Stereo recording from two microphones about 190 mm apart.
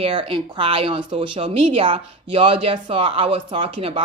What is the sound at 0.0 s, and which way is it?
A woman's voice, 30° right (ahead or behind).